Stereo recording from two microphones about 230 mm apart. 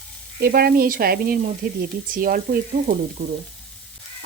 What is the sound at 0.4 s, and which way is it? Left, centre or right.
Speech, right.